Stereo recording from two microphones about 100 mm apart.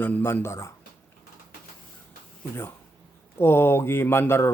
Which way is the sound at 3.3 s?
25° left (ahead or behind).